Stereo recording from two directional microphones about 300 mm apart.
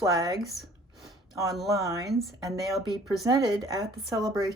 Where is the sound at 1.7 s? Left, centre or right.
Centre.